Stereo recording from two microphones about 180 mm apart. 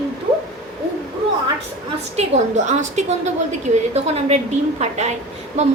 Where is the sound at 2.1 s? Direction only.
40° right (ahead or behind).